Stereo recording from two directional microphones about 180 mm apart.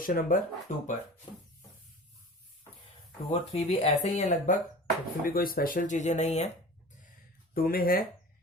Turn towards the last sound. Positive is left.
turn(degrees=55)  # may be behind; listen again after turning